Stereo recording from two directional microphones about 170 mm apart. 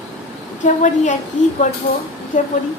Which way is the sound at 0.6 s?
45° left (ahead or behind).